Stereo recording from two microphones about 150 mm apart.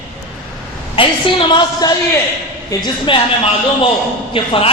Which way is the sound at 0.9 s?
35° left (ahead or behind).